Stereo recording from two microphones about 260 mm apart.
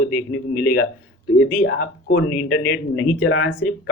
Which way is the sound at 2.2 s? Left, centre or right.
Left.